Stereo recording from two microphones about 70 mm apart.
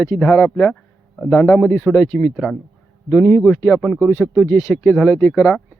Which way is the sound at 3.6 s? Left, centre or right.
Centre.